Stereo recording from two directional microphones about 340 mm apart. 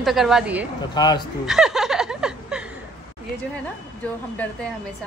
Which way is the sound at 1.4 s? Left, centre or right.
Centre.